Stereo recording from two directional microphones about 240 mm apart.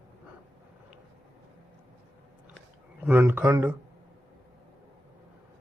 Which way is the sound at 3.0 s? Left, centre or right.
Centre.